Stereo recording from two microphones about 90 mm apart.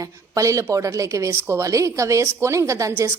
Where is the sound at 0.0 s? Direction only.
35° right (ahead or behind).